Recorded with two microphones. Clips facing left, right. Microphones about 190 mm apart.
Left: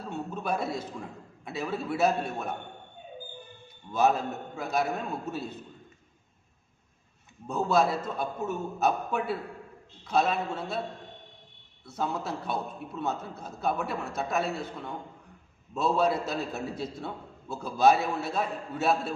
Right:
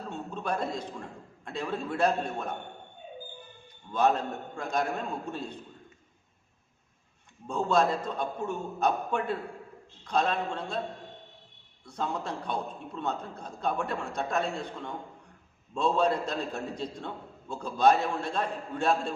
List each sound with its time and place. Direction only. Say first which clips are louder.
0.1 s a man's voice: left 2 dB; 10° left (ahead or behind)
3.9 s a man's voice: left 1 dB; 5° left (ahead or behind)
7.4 s a man's voice: left 1 dB; 5° left (ahead or behind)
11.9 s a man's voice: left 1 dB; 5° left (ahead or behind)